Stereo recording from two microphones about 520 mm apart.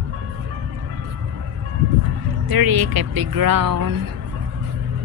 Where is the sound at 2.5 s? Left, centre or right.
Right.